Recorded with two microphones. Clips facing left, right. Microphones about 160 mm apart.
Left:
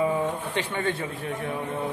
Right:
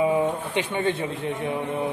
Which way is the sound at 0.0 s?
15° right (ahead or behind).